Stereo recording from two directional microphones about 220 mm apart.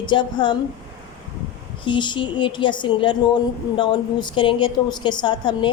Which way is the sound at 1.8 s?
20° left (ahead or behind).